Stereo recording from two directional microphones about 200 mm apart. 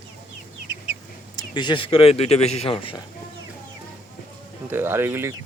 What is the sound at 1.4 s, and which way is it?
Speech, 20° left (ahead or behind).